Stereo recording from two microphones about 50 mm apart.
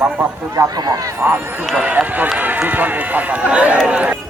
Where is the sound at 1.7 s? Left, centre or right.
Right.